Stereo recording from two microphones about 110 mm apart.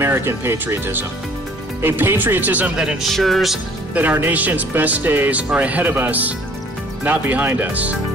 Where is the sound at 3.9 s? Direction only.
15° right (ahead or behind).